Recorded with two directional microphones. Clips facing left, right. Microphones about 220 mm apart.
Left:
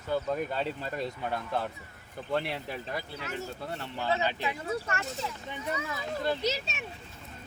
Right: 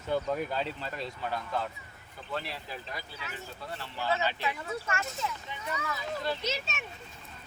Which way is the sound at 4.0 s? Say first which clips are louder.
Left 1 dB; 15° left (ahead or behind).